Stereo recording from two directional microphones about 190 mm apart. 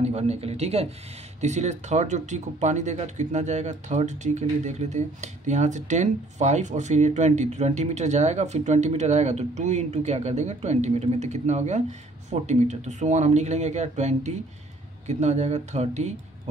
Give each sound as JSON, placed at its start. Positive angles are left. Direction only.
{"t": 0.0, "sound": "speech", "side_deg": -35}